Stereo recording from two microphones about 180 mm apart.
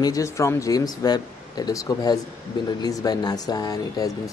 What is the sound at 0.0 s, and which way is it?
Speech, 20° left (ahead or behind).